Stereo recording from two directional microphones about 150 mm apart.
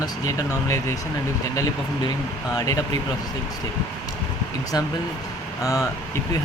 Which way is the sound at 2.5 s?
25° left (ahead or behind).